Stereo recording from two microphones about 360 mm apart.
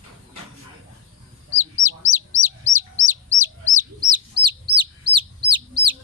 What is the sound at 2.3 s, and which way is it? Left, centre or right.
Chicken, centre.